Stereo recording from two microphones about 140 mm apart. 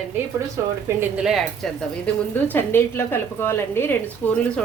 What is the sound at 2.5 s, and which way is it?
A woman's voice, 15° left (ahead or behind).